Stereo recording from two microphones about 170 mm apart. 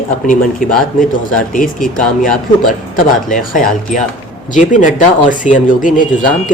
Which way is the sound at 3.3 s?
50° left (ahead or behind).